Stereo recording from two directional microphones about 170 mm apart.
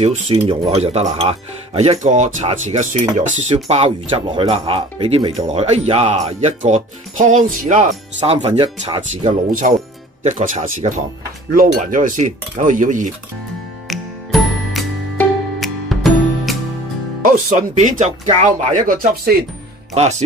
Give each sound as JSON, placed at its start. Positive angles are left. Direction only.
{"t": 0.5, "sound": "speech", "side_deg": -35}
{"t": 8.3, "sound": "speech", "side_deg": -35}
{"t": 9.3, "sound": "speech", "side_deg": -50}
{"t": 13.8, "sound": "music", "side_deg": 0}
{"t": 17.2, "sound": "speech", "side_deg": -50}
{"t": 19.9, "sound": "speech", "side_deg": -40}